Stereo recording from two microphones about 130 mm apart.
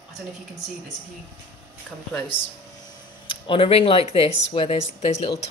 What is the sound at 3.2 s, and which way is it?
Speech, 45° left (ahead or behind).